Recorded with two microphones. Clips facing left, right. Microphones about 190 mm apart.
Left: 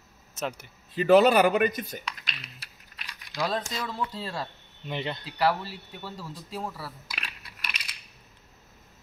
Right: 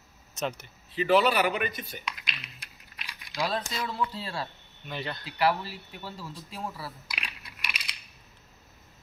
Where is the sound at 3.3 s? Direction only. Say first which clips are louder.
Left 1 dB; 40° left (ahead or behind).